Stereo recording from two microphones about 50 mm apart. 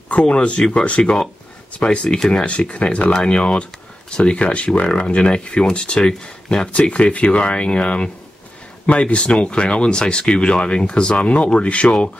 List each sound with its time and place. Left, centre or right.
0.1 s speech: left
3.1 s speech: centre